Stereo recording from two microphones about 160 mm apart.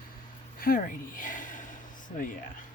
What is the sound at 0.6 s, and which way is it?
Speech, 65° left (ahead or behind).